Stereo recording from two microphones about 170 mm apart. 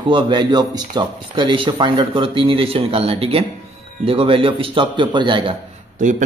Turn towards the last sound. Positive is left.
turn(degrees=-50)  # may be behind; listen again after turning